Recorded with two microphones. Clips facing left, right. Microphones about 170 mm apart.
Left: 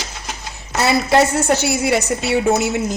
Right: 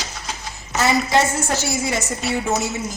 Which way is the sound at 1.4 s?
65° left (ahead or behind).